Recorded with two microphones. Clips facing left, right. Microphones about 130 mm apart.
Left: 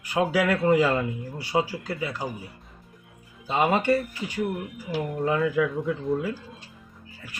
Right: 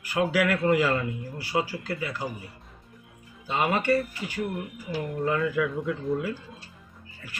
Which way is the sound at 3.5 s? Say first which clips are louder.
Left 2 dB; 15° left (ahead or behind).